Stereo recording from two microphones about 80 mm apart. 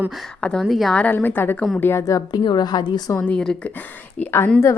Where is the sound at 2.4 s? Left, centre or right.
Left.